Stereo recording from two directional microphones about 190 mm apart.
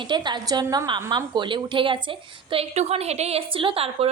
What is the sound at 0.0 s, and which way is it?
A woman's voice, 25° right (ahead or behind).